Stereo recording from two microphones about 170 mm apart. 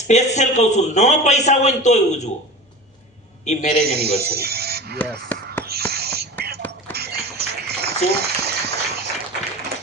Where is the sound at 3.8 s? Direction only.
70° right (ahead or behind).